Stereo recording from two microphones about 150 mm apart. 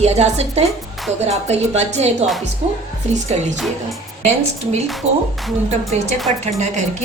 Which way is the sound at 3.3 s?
45° right (ahead or behind).